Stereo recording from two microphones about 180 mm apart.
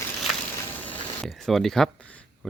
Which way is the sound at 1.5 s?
Centre (ahead or behind).